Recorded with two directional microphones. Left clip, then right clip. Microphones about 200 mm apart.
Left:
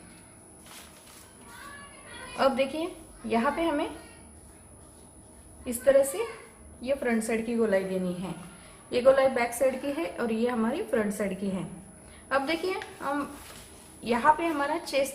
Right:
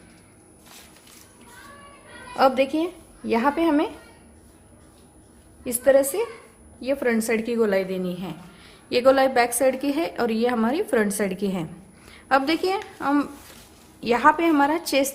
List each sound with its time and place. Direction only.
2.3 s a woman's voice: 45° right (ahead or behind)
6.8 s a woman's voice: 50° right (ahead or behind)